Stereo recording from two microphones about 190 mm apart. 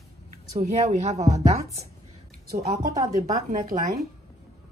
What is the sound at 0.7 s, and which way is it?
Speech, 35° right (ahead or behind).